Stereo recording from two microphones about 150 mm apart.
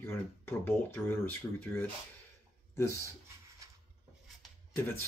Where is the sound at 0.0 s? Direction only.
15° left (ahead or behind).